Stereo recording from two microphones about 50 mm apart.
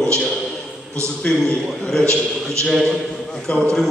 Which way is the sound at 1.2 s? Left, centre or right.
Centre.